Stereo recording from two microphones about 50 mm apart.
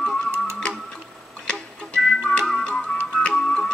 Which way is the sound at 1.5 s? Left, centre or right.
Centre.